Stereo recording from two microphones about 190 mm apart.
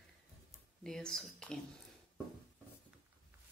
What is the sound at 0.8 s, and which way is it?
Speech, 5° left (ahead or behind).